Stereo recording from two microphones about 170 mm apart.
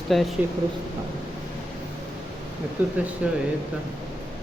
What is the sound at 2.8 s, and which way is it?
Speech, 10° right (ahead or behind).